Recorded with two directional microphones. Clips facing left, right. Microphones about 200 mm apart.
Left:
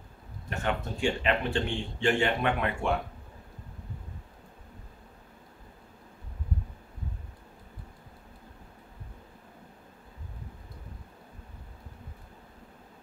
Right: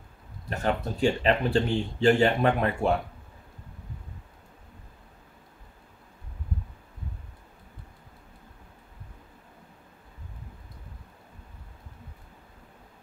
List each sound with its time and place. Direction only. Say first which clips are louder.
0.5 s speech: right 4 dB; 35° right (ahead or behind)